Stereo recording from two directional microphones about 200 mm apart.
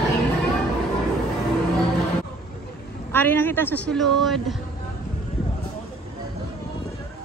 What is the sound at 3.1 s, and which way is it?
A woman's voice, 10° left (ahead or behind).